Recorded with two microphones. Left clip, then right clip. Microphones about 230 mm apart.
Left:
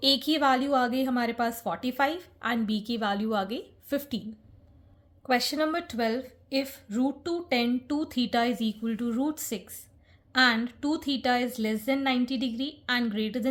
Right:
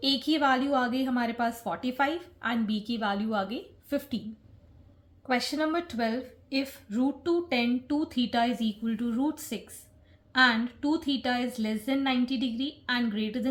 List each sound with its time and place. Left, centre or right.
0.0 s a woman's voice: left
5.2 s a woman's voice: left